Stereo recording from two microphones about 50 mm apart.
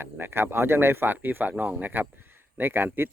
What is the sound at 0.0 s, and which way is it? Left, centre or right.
Speech, right.